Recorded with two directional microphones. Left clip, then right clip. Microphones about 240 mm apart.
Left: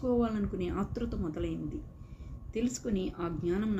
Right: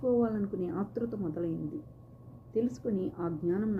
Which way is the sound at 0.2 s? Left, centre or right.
Centre.